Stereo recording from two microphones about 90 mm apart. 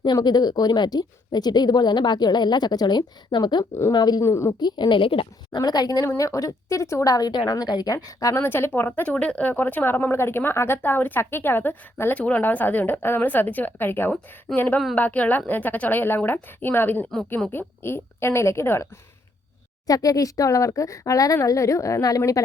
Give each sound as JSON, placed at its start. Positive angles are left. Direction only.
{"t": 0.0, "sound": "a woman's voice", "side_deg": 50}
{"t": 4.2, "sound": "speech", "side_deg": 30}
{"t": 4.6, "sound": "a woman's voice", "side_deg": 60}
{"t": 5.5, "sound": "a woman's voice", "side_deg": 50}
{"t": 8.4, "sound": "a woman's voice", "side_deg": 25}
{"t": 19.9, "sound": "speech", "side_deg": 40}